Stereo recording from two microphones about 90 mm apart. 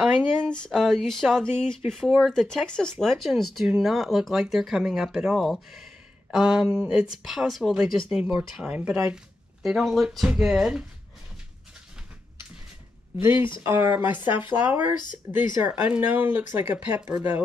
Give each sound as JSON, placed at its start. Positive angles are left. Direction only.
{"t": 0.4, "sound": "speech", "side_deg": 10}
{"t": 13.2, "sound": "speech", "side_deg": -30}